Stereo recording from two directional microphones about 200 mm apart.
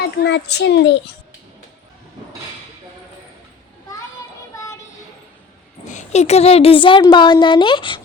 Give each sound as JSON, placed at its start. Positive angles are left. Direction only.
{"t": 0.2, "sound": "a child's voice", "side_deg": 60}
{"t": 5.9, "sound": "speech", "side_deg": 35}